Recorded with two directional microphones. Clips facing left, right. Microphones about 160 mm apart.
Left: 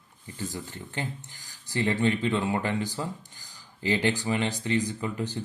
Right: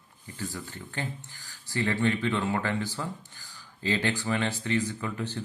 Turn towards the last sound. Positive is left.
turn(degrees=15)  # may be behind; listen again after turning